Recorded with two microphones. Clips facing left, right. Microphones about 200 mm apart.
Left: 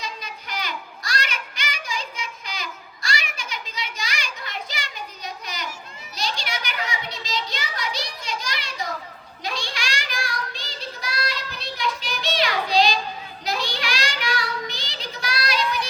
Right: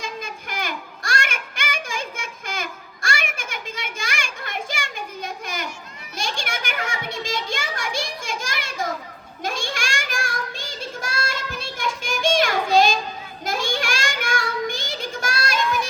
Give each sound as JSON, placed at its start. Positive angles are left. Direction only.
{"t": 0.0, "sound": "a sound", "side_deg": -50}
{"t": 6.1, "sound": "children playing", "side_deg": -50}
{"t": 9.4, "sound": "child singing", "side_deg": -50}